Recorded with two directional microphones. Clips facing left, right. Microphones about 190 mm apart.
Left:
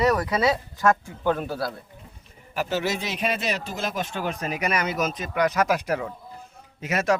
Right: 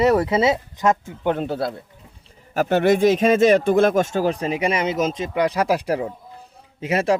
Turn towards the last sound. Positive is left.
turn(degrees=-30)  # may be behind; listen again after turning